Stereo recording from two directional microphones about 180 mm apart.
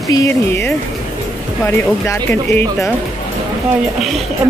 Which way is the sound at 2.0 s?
15° left (ahead or behind).